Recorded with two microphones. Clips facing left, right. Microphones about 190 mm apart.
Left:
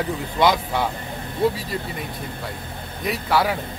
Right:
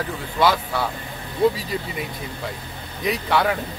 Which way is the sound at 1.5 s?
Centre (ahead or behind).